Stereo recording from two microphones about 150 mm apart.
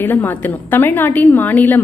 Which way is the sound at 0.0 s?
10° left (ahead or behind).